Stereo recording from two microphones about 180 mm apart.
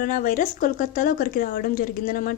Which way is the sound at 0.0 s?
50° left (ahead or behind).